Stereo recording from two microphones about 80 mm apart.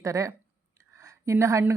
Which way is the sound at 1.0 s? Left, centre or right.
Right.